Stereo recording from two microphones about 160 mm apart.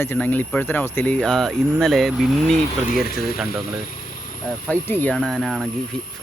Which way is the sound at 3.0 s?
70° left (ahead or behind).